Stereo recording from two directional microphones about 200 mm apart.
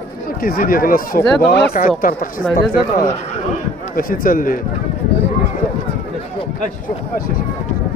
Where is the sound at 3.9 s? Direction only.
45° left (ahead or behind).